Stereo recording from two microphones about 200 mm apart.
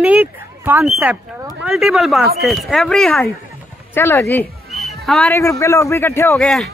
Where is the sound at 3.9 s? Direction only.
15° left (ahead or behind).